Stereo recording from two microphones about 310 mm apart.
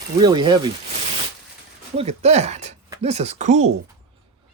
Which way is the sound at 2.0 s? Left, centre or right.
Right.